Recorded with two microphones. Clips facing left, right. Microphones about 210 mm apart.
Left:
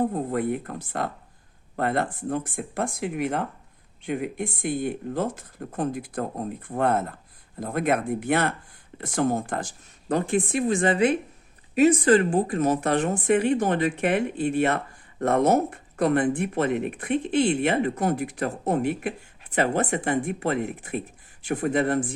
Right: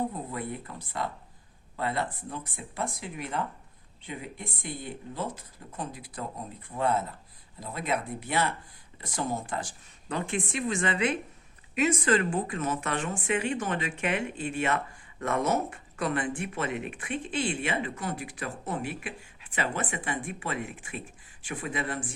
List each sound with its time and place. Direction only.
0.0 s speech: 50° left (ahead or behind)
16.1 s speech: 55° left (ahead or behind)
17.9 s speech: 40° left (ahead or behind)
18.2 s speech: 60° left (ahead or behind)
19.5 s speech: 45° left (ahead or behind)